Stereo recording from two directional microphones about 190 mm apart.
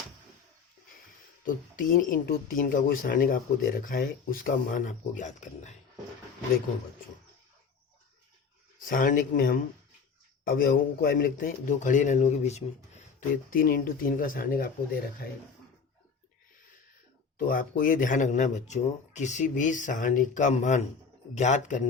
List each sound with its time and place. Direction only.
1.5 s a man's voice: 45° left (ahead or behind)
8.9 s a man's voice: 45° left (ahead or behind)
17.3 s speech: 45° left (ahead or behind)